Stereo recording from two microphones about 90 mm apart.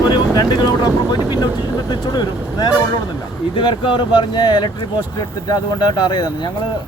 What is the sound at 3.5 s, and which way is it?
Speech, 65° left (ahead or behind).